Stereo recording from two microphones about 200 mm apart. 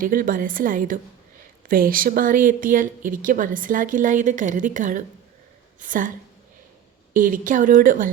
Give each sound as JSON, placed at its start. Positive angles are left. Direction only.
{"t": 0.0, "sound": "a woman's voice", "side_deg": -45}
{"t": 7.1, "sound": "a woman's voice", "side_deg": -40}